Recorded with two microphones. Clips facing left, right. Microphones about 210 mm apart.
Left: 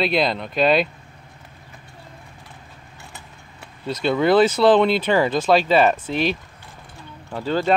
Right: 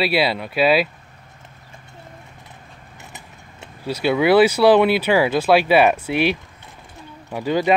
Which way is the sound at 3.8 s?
10° right (ahead or behind).